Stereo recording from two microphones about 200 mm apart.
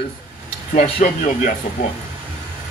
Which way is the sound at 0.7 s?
35° left (ahead or behind).